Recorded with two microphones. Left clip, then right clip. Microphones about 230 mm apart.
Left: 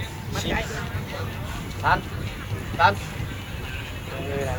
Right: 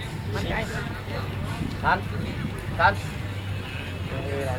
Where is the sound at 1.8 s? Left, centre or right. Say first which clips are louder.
Left 2 dB; left.